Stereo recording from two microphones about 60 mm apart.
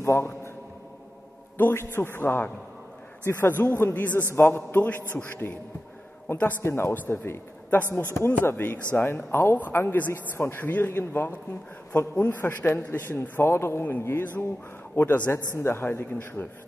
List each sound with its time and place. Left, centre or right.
0.0 s a man's voice: left
1.6 s a man's voice: left
6.6 s a man's voice: left
7.7 s a man's voice: left
10.6 s a man's voice: left
15.6 s a man's voice: left